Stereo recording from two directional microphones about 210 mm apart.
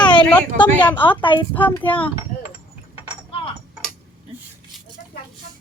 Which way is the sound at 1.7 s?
10° left (ahead or behind).